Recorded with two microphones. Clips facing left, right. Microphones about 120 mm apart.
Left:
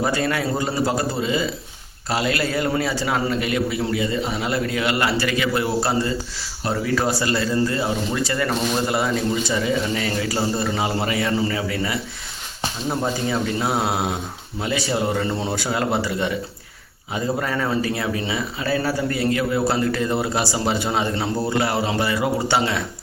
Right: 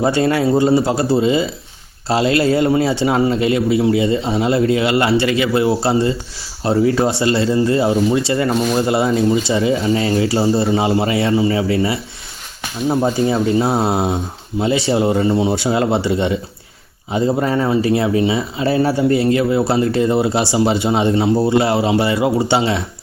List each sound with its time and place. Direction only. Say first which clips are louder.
0.0 s speech: right 7 dB; 25° right (ahead or behind)
13.2 s speech: right 7 dB; 25° right (ahead or behind)